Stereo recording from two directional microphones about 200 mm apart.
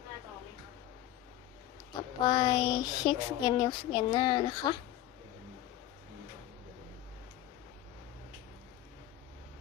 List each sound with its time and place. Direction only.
1.9 s speech: 20° left (ahead or behind)